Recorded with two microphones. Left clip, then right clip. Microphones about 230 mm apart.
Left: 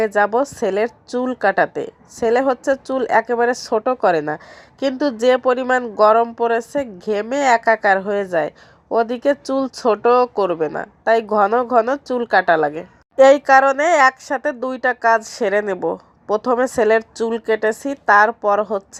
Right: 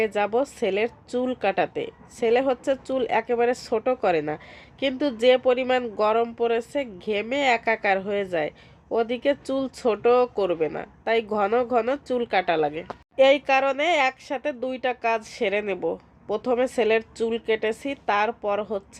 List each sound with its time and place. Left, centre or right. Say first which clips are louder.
0.0 s a woman's voice: left 7 dB; centre